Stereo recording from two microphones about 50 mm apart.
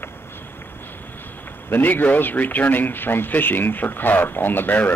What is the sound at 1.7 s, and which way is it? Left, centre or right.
Speech, left.